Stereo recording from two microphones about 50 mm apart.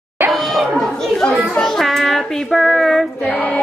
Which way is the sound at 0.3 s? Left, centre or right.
Centre.